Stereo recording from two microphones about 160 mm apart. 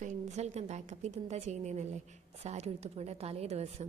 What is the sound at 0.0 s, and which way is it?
A woman's voice, 50° right (ahead or behind).